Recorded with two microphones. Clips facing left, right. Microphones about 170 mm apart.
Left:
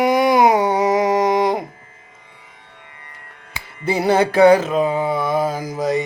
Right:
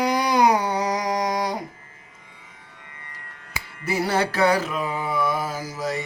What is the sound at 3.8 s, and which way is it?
Music, 25° left (ahead or behind).